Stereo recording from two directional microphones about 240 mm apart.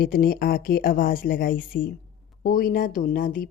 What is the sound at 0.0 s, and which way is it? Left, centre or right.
A woman's voice, left.